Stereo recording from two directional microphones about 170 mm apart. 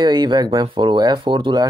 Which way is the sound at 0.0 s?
25° right (ahead or behind).